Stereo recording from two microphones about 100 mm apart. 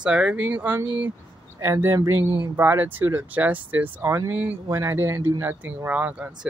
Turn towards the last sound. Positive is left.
turn(degrees=-15)  # may be behind; listen again after turning